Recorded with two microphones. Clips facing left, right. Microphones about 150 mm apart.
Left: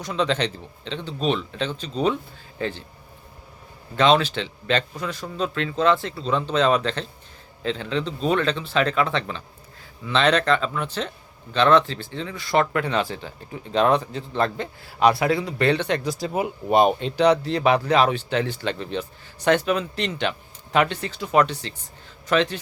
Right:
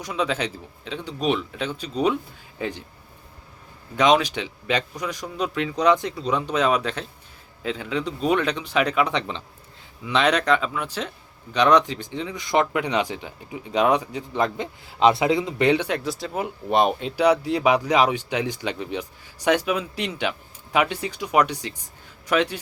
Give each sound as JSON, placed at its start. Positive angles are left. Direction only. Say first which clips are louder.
{"t": 0.0, "sound": "speech", "louder": "left 2 dB", "side_deg": -10}
{"t": 3.9, "sound": "speech", "louder": "even", "side_deg": -15}
{"t": 16.0, "sound": "speech", "louder": "left 2 dB", "side_deg": 0}